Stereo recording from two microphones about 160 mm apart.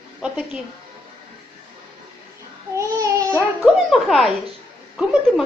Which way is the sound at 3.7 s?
Centre (ahead or behind).